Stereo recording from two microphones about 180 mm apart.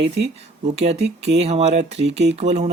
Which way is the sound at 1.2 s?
35° right (ahead or behind).